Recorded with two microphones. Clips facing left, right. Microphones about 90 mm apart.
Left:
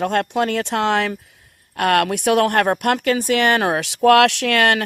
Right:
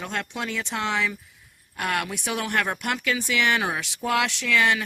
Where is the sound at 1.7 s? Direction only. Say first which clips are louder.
Left 10 dB; 65° left (ahead or behind).